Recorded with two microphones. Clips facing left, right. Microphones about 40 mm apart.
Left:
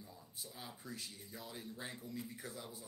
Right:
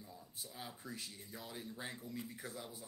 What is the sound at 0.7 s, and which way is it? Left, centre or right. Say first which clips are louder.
Speech: even; centre.